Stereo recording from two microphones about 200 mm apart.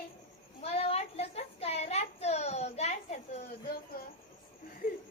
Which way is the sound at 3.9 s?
45° left (ahead or behind).